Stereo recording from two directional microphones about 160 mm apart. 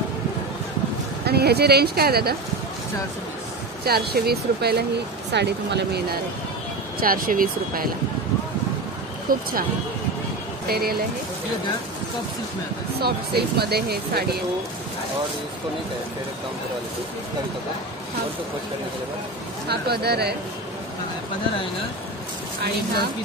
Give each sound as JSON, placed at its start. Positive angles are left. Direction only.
{"t": 1.2, "sound": "speech", "side_deg": -85}
{"t": 3.8, "sound": "speech", "side_deg": -75}
{"t": 7.0, "sound": "speech", "side_deg": -60}
{"t": 9.3, "sound": "speech", "side_deg": -65}
{"t": 10.7, "sound": "speech", "side_deg": -75}
{"t": 13.0, "sound": "speech", "side_deg": -85}
{"t": 19.7, "sound": "speech", "side_deg": -90}